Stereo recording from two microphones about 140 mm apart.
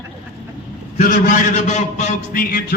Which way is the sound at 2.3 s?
90° left.